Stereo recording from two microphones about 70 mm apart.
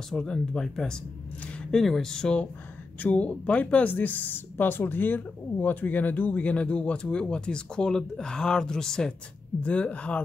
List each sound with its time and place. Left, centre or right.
0.1 s speech: centre
9.6 s speech: centre